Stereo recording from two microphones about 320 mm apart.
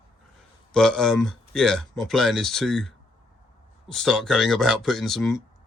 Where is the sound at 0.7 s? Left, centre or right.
Centre.